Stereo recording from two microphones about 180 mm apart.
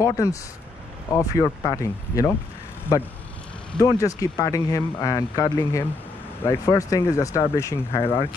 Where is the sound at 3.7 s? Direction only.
20° left (ahead or behind).